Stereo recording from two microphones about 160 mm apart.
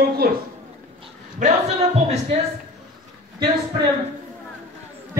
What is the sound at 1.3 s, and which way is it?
Speech, 45° right (ahead or behind).